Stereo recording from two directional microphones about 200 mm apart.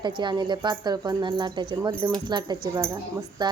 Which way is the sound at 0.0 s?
25° right (ahead or behind).